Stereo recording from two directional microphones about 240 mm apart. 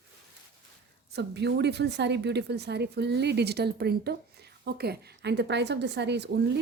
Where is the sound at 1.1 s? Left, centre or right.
Right.